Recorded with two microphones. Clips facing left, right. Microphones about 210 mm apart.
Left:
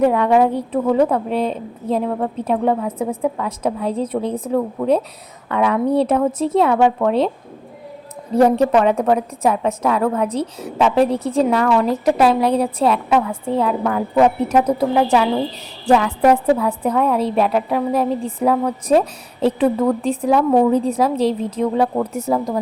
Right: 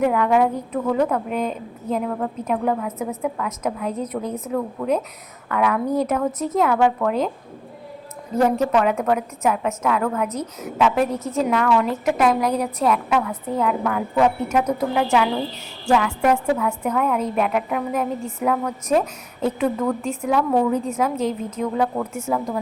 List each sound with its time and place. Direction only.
0.0 s a woman's voice: 30° left (ahead or behind)
8.3 s a woman's voice: 35° left (ahead or behind)